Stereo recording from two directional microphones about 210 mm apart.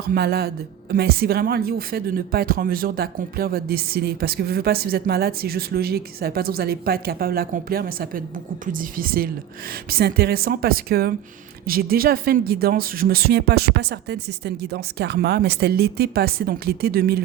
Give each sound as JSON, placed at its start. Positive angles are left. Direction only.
{"t": 0.0, "sound": "speech", "side_deg": -45}